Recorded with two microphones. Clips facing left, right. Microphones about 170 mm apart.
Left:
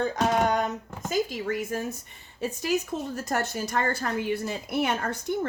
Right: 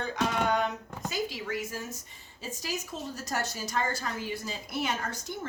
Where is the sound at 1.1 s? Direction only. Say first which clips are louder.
Left 7 dB; 50° left (ahead or behind).